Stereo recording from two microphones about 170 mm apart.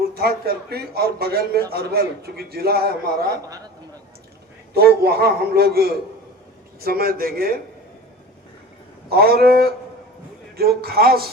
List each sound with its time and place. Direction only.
0.1 s a man's voice: 65° right (ahead or behind)
4.7 s a man's voice: 70° right (ahead or behind)
9.0 s a man's voice: 65° right (ahead or behind)